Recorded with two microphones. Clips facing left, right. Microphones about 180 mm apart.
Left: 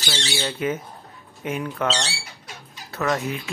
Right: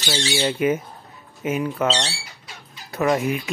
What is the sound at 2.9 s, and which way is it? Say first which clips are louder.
Speech: right 4 dB; 10° right (ahead or behind).